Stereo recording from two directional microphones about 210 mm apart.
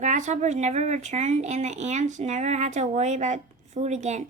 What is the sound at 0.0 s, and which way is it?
Speech, 35° right (ahead or behind).